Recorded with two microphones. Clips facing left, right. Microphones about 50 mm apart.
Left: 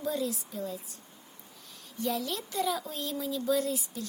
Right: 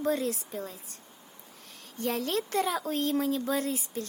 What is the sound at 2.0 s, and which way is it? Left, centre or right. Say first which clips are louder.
Speech: right 3 dB; right.